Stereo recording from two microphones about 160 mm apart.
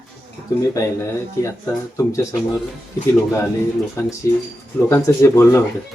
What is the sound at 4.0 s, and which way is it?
Speech, 20° left (ahead or behind).